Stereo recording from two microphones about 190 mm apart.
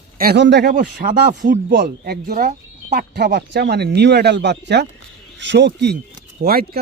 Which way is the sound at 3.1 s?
60° right (ahead or behind).